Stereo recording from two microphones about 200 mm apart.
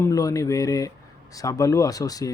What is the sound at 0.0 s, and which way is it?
Speech, 15° left (ahead or behind).